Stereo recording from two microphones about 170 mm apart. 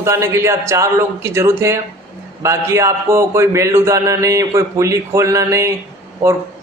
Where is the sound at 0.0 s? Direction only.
15° right (ahead or behind).